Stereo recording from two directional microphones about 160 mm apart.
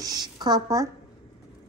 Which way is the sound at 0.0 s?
25° right (ahead or behind).